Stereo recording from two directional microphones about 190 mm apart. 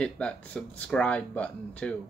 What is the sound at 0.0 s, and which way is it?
Speech, 5° left (ahead or behind).